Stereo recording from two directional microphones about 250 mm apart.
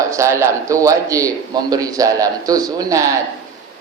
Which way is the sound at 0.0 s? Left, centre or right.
Centre.